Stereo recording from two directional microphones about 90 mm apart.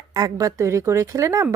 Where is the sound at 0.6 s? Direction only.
30° right (ahead or behind).